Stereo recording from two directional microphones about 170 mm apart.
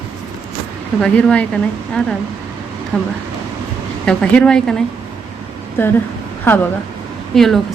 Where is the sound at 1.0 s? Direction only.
5° left (ahead or behind).